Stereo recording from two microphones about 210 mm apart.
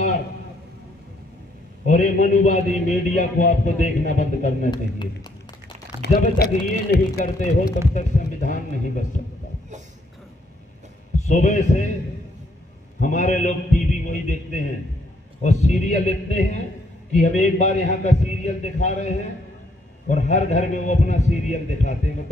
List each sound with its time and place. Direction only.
1.9 s a man's voice: 35° left (ahead or behind)
6.3 s speech: 50° left (ahead or behind)
7.9 s a man's voice: 35° left (ahead or behind)
11.1 s a man's voice: 35° left (ahead or behind)
13.0 s a man's voice: 35° left (ahead or behind)